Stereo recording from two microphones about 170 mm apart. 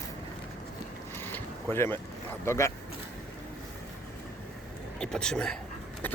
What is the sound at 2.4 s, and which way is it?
Speech, 15° left (ahead or behind).